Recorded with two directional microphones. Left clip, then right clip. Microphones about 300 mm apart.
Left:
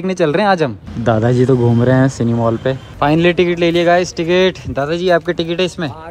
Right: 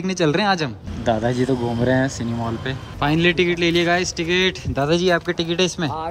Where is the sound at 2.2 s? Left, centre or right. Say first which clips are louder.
Left 10 dB; centre.